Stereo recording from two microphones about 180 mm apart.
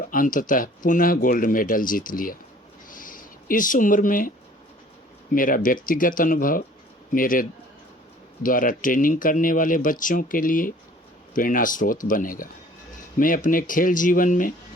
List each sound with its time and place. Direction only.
0.1 s speech: 50° left (ahead or behind)
2.9 s a sound: 50° left (ahead or behind)
5.3 s speech: 50° left (ahead or behind)
8.4 s speech: 50° left (ahead or behind)